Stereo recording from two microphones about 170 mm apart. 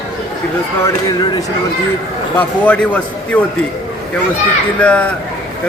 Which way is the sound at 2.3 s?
10° left (ahead or behind).